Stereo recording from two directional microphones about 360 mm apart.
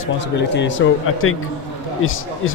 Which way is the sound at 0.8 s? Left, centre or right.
Left.